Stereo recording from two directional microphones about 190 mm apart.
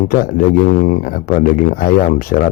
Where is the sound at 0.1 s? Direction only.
50° left (ahead or behind).